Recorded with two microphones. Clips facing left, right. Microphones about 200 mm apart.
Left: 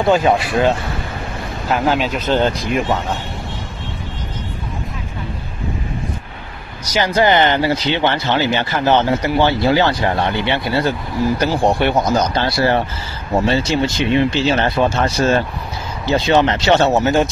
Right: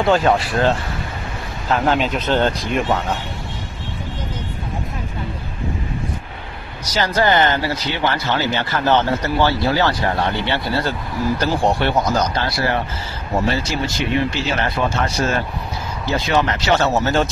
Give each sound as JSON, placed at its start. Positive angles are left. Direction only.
{"t": 0.1, "sound": "speech", "side_deg": 15}
{"t": 6.9, "sound": "speech", "side_deg": 15}
{"t": 12.4, "sound": "speech", "side_deg": 30}
{"t": 16.2, "sound": "speech", "side_deg": 25}